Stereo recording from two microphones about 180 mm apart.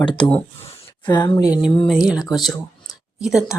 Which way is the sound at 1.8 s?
Centre (ahead or behind).